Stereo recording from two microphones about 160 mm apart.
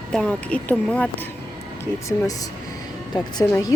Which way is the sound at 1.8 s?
20° left (ahead or behind).